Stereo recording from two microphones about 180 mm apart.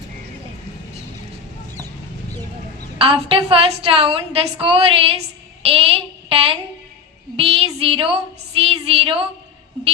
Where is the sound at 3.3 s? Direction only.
30° right (ahead or behind).